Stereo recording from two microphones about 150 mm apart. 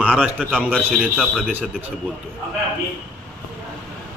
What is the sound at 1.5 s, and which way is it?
Speech, 10° right (ahead or behind).